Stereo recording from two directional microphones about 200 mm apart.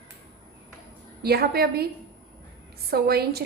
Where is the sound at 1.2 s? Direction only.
50° right (ahead or behind).